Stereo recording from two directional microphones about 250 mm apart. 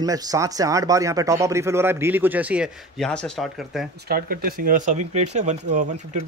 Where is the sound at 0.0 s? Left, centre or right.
Centre.